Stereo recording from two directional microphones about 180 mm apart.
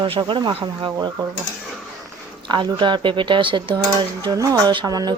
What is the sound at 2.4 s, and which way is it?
Speech, 25° right (ahead or behind).